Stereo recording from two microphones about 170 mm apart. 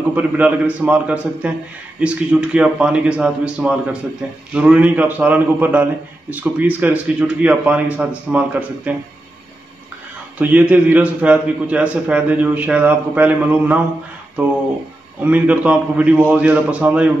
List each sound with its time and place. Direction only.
0.1 s a man's voice: 10° right (ahead or behind)
10.4 s a man's voice: 10° right (ahead or behind)
15.2 s a man's voice: 10° right (ahead or behind)